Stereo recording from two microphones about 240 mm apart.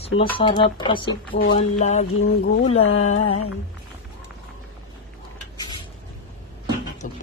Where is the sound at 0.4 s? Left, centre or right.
Left.